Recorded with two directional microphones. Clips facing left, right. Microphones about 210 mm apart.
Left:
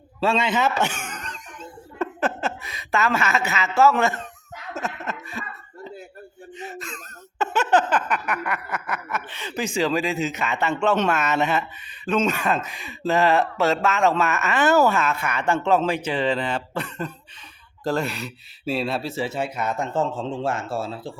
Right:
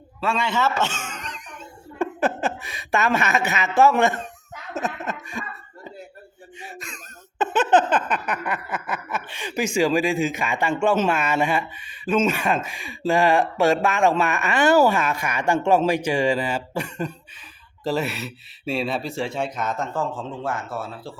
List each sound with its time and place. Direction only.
0.2 s a man's voice: 25° left (ahead or behind)
2.0 s speech: 15° right (ahead or behind)
4.7 s a sound: 15° right (ahead or behind)
6.6 s a sound: 15° right (ahead or behind)
9.7 s speech: 15° right (ahead or behind); by 19.9 s 10° left (ahead or behind)
19.9 s a man's voice: 25° left (ahead or behind)